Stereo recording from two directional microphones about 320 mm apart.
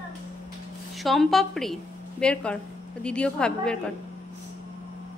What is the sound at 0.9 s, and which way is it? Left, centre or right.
A woman's voice, centre.